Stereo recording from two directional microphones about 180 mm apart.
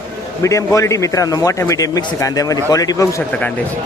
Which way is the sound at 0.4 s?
15° left (ahead or behind).